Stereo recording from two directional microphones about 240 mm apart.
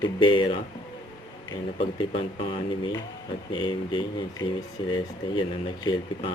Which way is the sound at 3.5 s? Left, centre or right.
Centre.